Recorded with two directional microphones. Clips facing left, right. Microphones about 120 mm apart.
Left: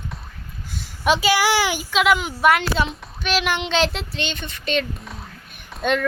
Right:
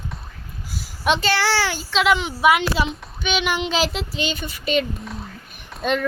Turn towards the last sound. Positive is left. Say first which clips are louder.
# left 1 dB
turn(degrees=0)  # may be behind; listen again after turning